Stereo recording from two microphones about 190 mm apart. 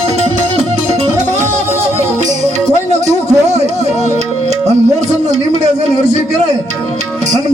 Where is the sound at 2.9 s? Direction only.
35° right (ahead or behind).